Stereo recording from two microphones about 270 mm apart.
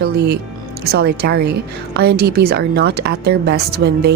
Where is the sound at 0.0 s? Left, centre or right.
Right.